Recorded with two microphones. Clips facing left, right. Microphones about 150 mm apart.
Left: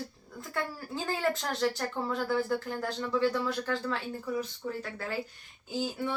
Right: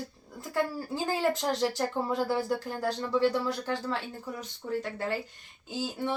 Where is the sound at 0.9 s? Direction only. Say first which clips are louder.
Left 1 dB; 15° right (ahead or behind).